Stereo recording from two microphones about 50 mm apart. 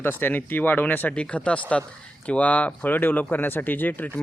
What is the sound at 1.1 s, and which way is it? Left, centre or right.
Speech, left.